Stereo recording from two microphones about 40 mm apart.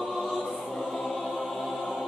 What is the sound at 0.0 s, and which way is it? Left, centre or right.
Choir, centre.